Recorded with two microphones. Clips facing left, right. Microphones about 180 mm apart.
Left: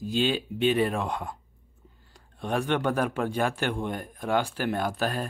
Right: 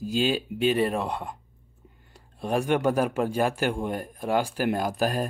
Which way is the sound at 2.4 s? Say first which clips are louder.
Right 3 dB; 10° right (ahead or behind).